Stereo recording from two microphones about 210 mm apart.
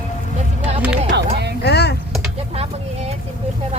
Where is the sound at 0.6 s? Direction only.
5° right (ahead or behind).